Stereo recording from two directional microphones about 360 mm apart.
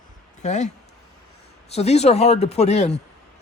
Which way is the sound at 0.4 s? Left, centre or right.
Centre.